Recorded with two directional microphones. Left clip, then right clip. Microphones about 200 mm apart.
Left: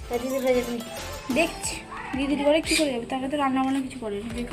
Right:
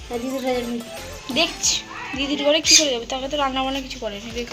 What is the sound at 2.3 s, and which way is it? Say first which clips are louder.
Speech: right 5 dB; centre (ahead or behind).